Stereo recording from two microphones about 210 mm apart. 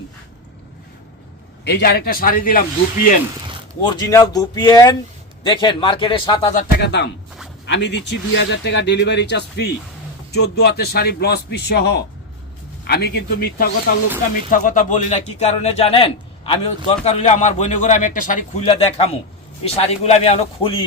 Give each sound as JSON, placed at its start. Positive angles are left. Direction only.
{"t": 1.6, "sound": "a man's voice", "side_deg": 50}
{"t": 3.8, "sound": "a man's voice", "side_deg": 20}
{"t": 6.5, "sound": "speech", "side_deg": 40}
{"t": 6.8, "sound": "a man's voice", "side_deg": 55}